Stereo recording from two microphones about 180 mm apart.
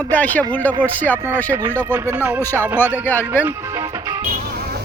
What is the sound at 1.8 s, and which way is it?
Speech, 10° right (ahead or behind).